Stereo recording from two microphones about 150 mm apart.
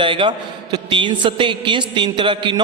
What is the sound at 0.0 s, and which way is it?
A man's voice, 35° right (ahead or behind).